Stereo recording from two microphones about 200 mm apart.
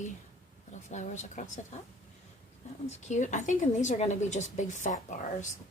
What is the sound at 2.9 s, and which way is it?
Speech, 35° left (ahead or behind).